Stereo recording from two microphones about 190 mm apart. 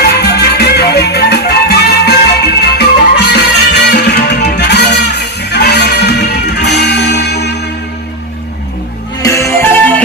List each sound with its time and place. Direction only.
0.0 s music: 60° left (ahead or behind)
9.2 s music: 15° left (ahead or behind)